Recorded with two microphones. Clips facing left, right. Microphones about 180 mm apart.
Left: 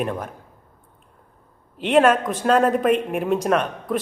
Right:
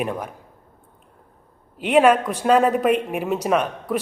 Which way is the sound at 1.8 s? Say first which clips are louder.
Right 1 dB; 10° right (ahead or behind).